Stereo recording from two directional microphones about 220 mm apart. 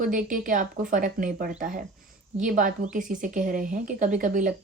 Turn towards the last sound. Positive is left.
turn(degrees=-35)  # may be behind; listen again after turning